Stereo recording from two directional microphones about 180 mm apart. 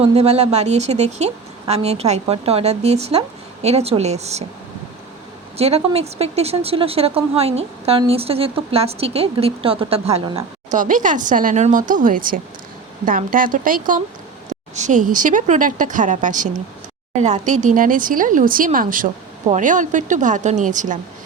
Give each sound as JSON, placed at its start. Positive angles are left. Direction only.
{"t": 0.0, "sound": "speech", "side_deg": -35}
{"t": 5.5, "sound": "speech", "side_deg": -35}
{"t": 10.8, "sound": "a woman's voice", "side_deg": -45}